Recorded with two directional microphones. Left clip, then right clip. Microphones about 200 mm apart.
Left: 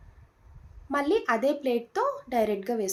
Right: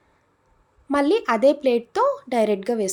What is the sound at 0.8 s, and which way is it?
Speech, 50° right (ahead or behind).